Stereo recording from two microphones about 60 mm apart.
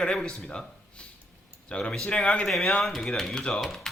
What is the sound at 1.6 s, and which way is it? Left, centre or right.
Speech, centre.